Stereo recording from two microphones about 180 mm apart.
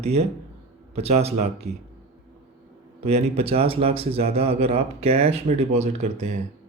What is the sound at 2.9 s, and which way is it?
Speech, 35° right (ahead or behind).